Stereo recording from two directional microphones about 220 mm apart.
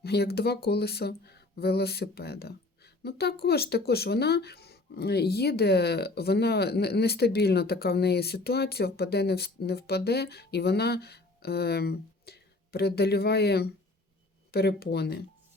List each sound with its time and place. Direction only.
0.0 s speech: 45° left (ahead or behind)